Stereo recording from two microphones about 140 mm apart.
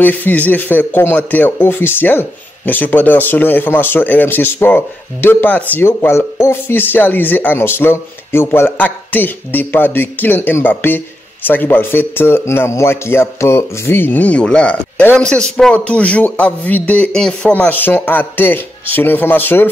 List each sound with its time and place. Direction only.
0.0 s speech: 10° left (ahead or behind)